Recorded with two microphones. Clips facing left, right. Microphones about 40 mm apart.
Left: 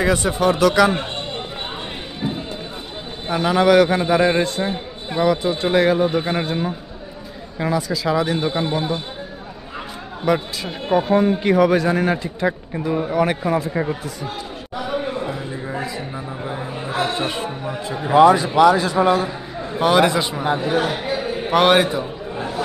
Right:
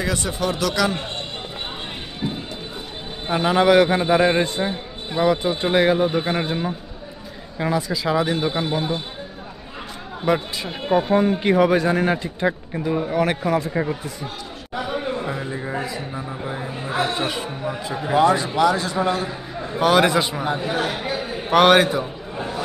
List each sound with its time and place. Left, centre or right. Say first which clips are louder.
0.0 s a man's voice: left 6 dB; left
2.2 s a sound: left 2 dB; centre
3.3 s a man's voice: left 1 dB; centre
10.2 s a man's voice: left 1 dB; centre
11.0 s speech: left 2 dB; centre
11.3 s a man's voice: left 1 dB; centre
14.9 s a sound: left 2 dB; centre
15.8 s a man's voice: left 1 dB; centre